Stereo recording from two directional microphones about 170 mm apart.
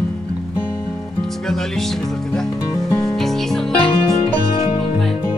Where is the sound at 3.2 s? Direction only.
Centre (ahead or behind).